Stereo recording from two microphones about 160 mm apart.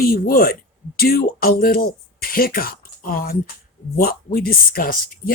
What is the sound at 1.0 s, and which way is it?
Speech, 70° left (ahead or behind).